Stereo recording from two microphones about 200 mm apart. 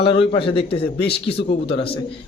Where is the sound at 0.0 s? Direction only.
25° left (ahead or behind).